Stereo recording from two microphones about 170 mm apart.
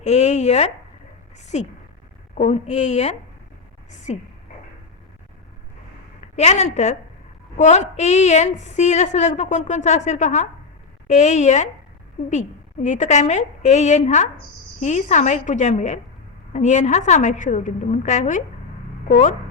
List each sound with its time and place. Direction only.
0.0 s a woman's voice: 40° left (ahead or behind)
6.3 s a woman's voice: 40° left (ahead or behind)